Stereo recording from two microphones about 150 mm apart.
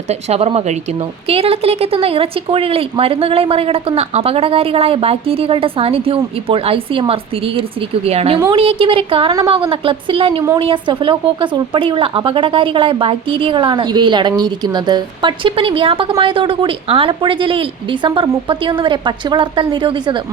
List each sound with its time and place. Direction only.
0.1 s speech: 45° right (ahead or behind)